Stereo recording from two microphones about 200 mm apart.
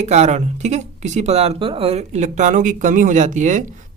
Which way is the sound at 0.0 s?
35° right (ahead or behind).